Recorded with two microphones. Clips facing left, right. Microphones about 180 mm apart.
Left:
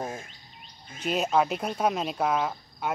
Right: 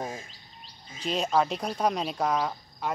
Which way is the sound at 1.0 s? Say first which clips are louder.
Left 1 dB; 5° left (ahead or behind).